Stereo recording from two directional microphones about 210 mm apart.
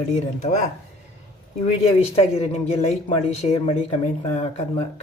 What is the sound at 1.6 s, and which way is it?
Speech, 30° left (ahead or behind).